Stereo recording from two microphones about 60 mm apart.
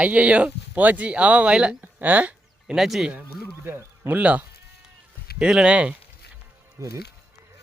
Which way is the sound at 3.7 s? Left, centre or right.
Right.